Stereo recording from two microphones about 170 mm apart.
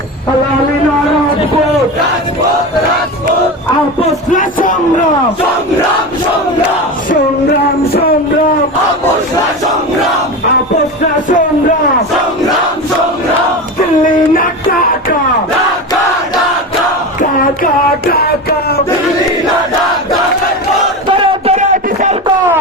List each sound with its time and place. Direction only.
4.0 s music: 50° left (ahead or behind)
14.0 s music: 55° left (ahead or behind)
21.1 s a sound: 35° right (ahead or behind)